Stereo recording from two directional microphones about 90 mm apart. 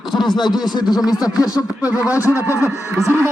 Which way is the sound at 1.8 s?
15° right (ahead or behind).